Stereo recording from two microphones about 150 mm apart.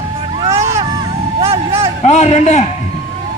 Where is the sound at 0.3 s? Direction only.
40° right (ahead or behind).